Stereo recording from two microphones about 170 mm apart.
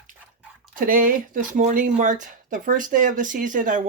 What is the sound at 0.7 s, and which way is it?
Speech, 55° right (ahead or behind).